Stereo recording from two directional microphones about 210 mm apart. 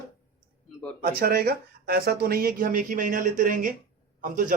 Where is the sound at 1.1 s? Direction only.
45° right (ahead or behind).